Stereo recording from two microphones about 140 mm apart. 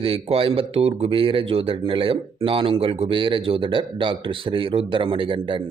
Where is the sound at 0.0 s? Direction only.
40° right (ahead or behind).